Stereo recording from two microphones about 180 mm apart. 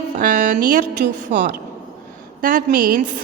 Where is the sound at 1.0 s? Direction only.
60° right (ahead or behind).